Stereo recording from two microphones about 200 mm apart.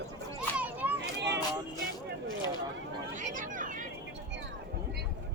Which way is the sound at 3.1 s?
40° right (ahead or behind).